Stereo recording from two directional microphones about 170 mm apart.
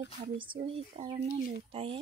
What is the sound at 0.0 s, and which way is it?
Speech, 30° right (ahead or behind).